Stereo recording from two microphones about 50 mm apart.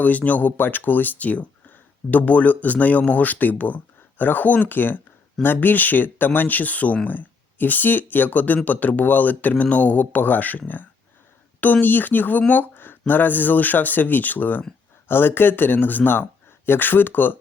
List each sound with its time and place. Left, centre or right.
0.0 s speech: left
11.6 s speech: left